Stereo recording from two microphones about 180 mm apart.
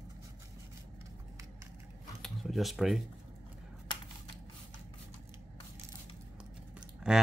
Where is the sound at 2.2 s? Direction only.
Centre (ahead or behind).